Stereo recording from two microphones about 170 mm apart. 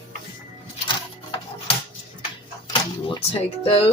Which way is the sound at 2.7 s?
30° left (ahead or behind).